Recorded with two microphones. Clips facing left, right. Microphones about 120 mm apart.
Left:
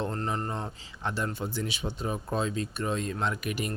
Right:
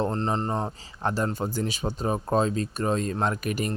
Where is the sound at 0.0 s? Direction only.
25° right (ahead or behind).